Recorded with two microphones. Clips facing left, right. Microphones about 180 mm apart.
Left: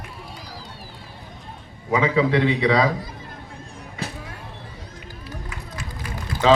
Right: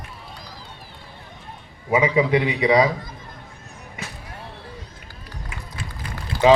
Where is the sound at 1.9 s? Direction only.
15° right (ahead or behind).